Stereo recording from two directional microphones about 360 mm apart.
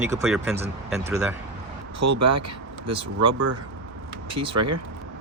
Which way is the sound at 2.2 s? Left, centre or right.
Right.